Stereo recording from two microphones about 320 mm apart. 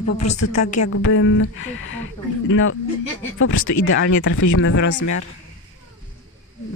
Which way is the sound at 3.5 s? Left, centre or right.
Left.